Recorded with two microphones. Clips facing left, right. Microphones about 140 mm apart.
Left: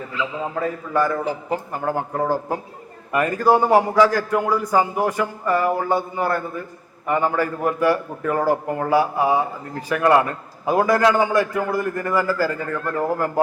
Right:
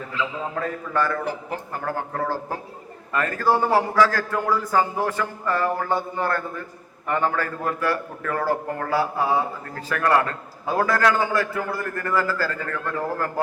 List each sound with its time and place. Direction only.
0.5 s a man's voice: 10° left (ahead or behind)